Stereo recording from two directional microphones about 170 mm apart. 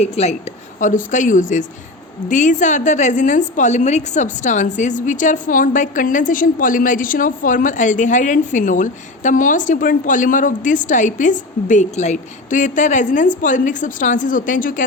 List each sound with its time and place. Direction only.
0.0 s a woman's voice: 40° left (ahead or behind)